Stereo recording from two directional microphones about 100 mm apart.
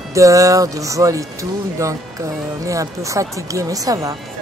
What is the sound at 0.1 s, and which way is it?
Speech, 35° right (ahead or behind).